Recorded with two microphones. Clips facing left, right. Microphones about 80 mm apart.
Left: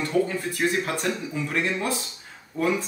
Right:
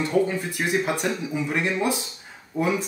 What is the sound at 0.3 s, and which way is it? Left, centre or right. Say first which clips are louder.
Speech: even; centre.